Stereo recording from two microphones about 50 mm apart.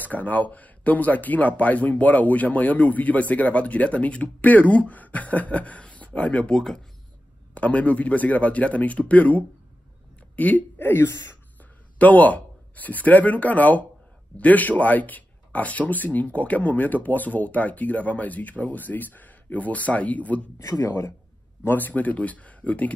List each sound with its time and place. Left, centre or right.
0.0 s speech: left
6.5 s speech: centre
7.5 s speech: left
10.8 s speech: left
12.0 s speech: left
20.5 s a man's voice: left
21.6 s speech: left